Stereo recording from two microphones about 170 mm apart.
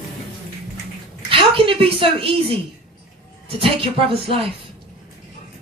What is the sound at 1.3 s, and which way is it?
A woman's voice, 30° right (ahead or behind).